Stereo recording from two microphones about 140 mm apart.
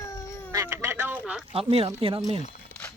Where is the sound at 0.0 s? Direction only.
25° left (ahead or behind).